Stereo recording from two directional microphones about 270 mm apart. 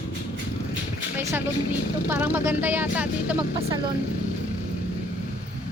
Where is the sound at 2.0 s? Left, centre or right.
Centre.